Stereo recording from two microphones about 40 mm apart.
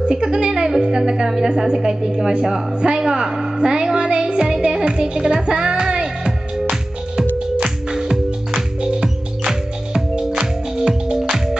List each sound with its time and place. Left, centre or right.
0.0 s a woman's voice: centre
3.0 s music: centre
7.9 s music: centre